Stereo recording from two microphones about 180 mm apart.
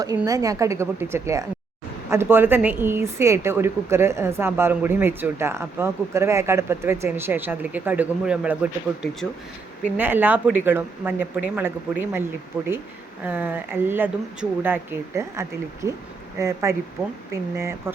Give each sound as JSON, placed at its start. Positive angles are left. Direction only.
{"t": 0.3, "sound": "speech", "side_deg": -20}